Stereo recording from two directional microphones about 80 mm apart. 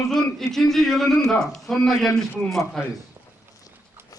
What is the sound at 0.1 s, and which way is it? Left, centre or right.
A man's voice, centre.